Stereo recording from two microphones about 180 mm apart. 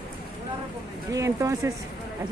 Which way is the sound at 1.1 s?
15° right (ahead or behind).